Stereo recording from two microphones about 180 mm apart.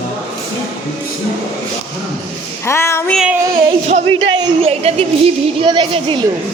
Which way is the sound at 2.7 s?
15° left (ahead or behind).